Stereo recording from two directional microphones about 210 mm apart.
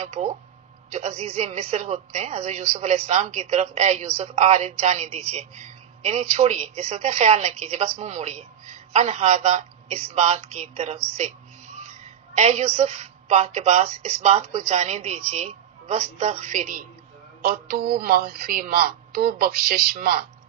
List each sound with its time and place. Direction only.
0.0 s speech: 35° right (ahead or behind)
12.3 s speech: 35° right (ahead or behind)